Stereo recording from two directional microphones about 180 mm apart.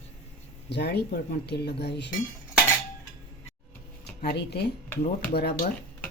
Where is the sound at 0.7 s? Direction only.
65° left (ahead or behind).